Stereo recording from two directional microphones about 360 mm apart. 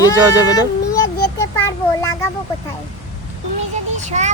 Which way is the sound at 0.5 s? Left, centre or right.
Centre.